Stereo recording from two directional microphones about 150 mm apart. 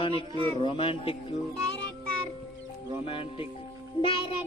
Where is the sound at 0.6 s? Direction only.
35° left (ahead or behind).